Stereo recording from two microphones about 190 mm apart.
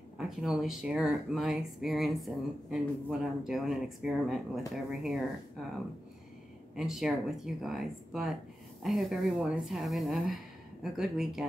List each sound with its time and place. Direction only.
0.2 s speech: centre (ahead or behind)
6.7 s speech: centre (ahead or behind)